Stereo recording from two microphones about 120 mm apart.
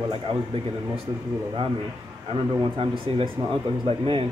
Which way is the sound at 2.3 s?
50° right (ahead or behind).